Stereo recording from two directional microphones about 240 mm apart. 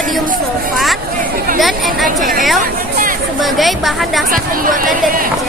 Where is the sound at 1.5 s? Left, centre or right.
Centre.